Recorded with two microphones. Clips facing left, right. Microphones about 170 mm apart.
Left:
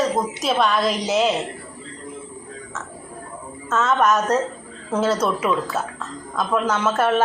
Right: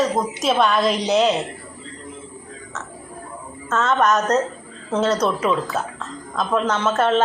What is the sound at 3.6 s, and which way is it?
Speech, 5° left (ahead or behind).